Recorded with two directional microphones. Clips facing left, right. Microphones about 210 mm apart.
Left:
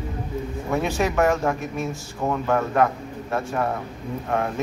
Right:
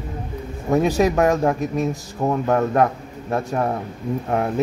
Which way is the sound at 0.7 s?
40° right (ahead or behind).